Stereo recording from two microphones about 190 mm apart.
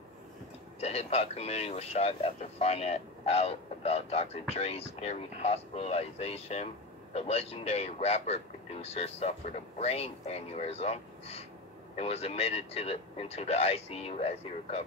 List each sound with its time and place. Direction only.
0.7 s speech: 30° left (ahead or behind)